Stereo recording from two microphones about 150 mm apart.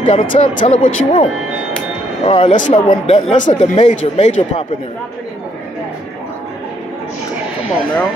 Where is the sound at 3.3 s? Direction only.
55° left (ahead or behind).